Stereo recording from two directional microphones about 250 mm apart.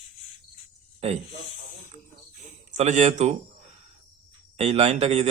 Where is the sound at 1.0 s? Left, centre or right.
Right.